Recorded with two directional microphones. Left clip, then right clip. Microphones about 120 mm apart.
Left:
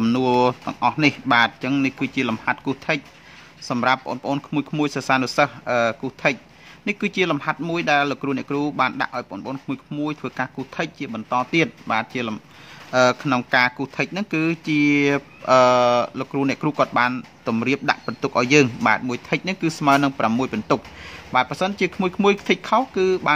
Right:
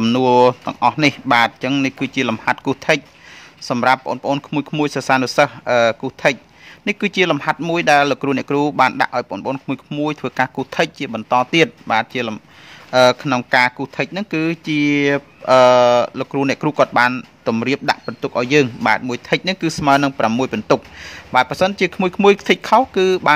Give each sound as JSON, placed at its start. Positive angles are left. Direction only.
{"t": 0.0, "sound": "speech", "side_deg": -40}
{"t": 18.0, "sound": "speech", "side_deg": -15}